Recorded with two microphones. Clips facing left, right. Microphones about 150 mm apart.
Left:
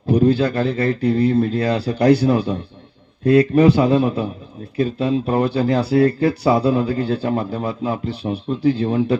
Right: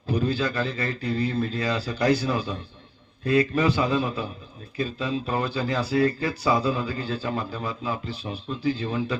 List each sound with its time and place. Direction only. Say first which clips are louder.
0.1 s speech: left 10 dB; 60° left (ahead or behind)